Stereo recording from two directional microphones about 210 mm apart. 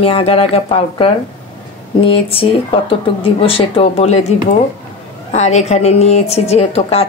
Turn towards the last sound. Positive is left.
turn(degrees=30)  # may be behind; listen again after turning